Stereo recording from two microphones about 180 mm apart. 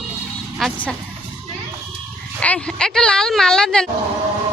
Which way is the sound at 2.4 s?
5° left (ahead or behind).